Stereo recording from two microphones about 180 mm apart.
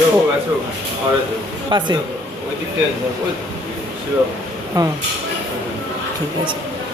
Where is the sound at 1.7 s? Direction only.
25° right (ahead or behind).